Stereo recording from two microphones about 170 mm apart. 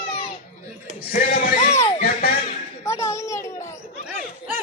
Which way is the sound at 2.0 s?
60° left (ahead or behind).